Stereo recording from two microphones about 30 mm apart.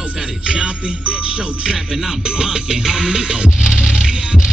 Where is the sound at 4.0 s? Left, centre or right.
Right.